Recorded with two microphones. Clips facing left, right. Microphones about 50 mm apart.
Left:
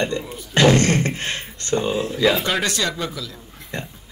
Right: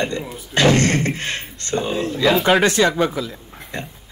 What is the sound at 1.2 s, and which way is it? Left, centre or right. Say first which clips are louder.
Speech: right 1 dB; left.